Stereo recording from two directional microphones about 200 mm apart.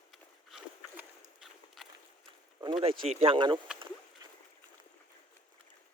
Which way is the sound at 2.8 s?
30° right (ahead or behind).